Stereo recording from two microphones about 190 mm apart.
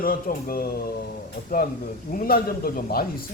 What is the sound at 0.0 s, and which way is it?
Speech, 50° left (ahead or behind).